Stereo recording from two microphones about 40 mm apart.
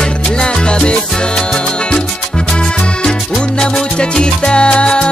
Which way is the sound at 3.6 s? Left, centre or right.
Left.